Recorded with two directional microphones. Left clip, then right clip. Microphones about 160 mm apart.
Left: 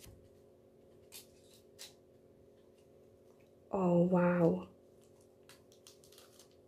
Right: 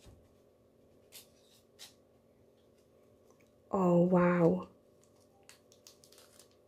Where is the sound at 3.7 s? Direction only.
20° right (ahead or behind).